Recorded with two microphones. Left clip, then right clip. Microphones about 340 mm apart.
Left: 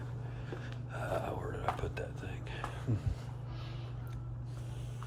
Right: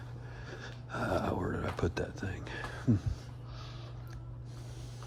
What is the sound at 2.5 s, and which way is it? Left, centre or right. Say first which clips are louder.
Music: right 6 dB; right.